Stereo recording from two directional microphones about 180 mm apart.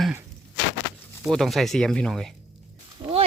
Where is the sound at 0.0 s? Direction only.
10° right (ahead or behind).